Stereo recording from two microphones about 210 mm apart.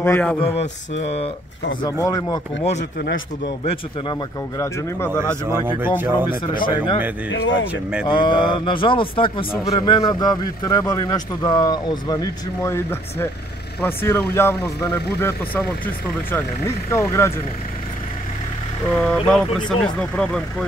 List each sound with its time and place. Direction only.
0.0 s speech: 5° left (ahead or behind)
0.4 s speech: 30° left (ahead or behind)
1.8 s speech: 15° left (ahead or behind)
2.7 s speech: 55° left (ahead or behind)
3.6 s speech: 15° left (ahead or behind)
5.9 s speech: 10° right (ahead or behind)
6.5 s speech: 20° left (ahead or behind)
7.2 s speech: 65° left (ahead or behind)
7.7 s speech: 5° right (ahead or behind)
8.1 s speech: 20° left (ahead or behind)
18.9 s speech: 5° left (ahead or behind)